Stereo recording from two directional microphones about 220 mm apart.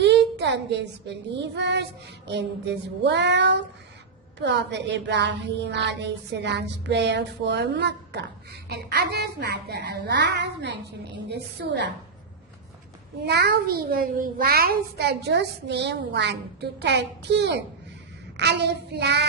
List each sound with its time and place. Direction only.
0.0 s a child's voice: 50° right (ahead or behind)
13.2 s a child's voice: 50° right (ahead or behind)